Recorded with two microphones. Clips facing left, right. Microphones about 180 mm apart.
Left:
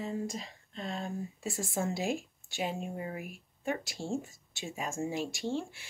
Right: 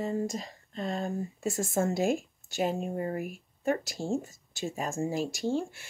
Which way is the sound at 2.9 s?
45° right (ahead or behind).